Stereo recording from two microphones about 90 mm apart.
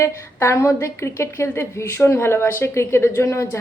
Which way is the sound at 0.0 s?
30° left (ahead or behind).